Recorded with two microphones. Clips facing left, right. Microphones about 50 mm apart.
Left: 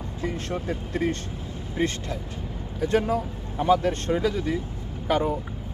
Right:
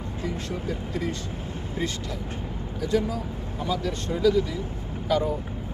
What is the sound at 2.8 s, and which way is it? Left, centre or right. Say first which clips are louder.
Speech: left 3 dB; left.